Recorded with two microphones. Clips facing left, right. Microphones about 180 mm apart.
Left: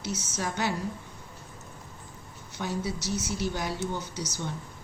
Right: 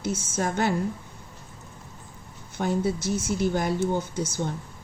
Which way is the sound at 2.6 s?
50° right (ahead or behind).